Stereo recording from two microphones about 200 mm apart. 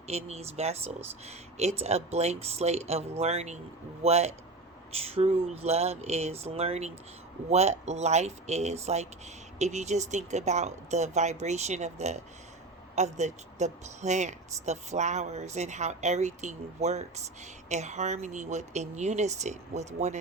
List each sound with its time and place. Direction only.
0.1 s speech: 35° right (ahead or behind)